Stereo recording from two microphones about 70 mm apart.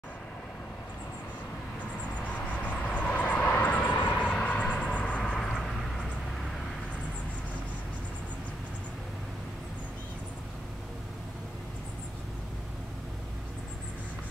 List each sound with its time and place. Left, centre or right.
2.2 s vehicle: centre
5.5 s vehicle: centre